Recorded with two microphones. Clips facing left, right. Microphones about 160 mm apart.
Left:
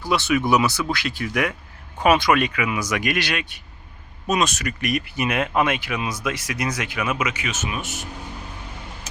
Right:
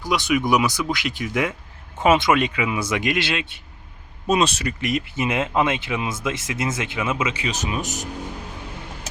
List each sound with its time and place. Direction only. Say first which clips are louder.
0.0 s speech: even; 15° right (ahead or behind); by 8.0 s 40° right (ahead or behind)